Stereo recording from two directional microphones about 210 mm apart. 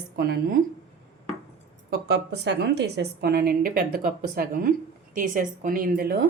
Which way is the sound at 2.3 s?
55° right (ahead or behind).